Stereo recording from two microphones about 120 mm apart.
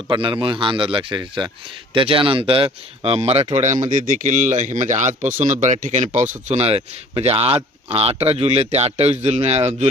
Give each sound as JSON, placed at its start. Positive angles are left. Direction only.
{"t": 0.1, "sound": "speech", "side_deg": -45}
{"t": 3.5, "sound": "speech", "side_deg": -75}
{"t": 6.5, "sound": "speech", "side_deg": -60}